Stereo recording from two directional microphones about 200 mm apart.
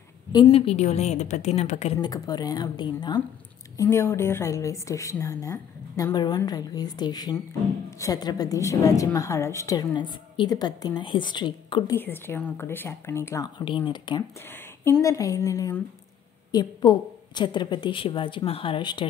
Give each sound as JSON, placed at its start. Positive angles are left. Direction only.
{"t": 0.3, "sound": "a woman's voice", "side_deg": 25}
{"t": 2.0, "sound": "a woman's voice", "side_deg": 20}
{"t": 12.0, "sound": "a woman's voice", "side_deg": 10}